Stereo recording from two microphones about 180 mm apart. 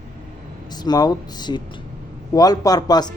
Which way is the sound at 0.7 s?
20° left (ahead or behind).